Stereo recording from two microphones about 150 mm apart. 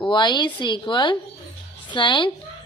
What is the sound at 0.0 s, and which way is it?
A woman's voice, 30° left (ahead or behind).